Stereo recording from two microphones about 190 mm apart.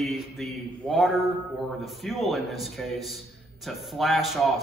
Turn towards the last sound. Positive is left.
turn(degrees=0)  # may be behind; listen again after turning